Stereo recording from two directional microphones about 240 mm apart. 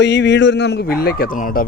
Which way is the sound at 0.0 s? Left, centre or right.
Left.